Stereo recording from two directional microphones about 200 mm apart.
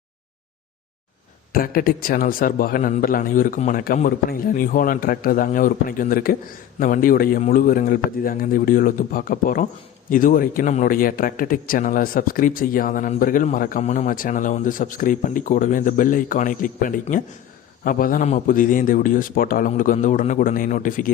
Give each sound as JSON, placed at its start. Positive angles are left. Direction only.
{"t": 1.5, "sound": "a man's voice", "side_deg": 45}